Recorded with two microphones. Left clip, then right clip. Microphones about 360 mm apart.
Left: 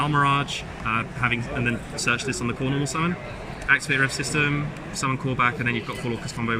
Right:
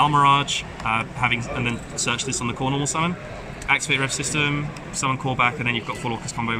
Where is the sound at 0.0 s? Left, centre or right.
Centre.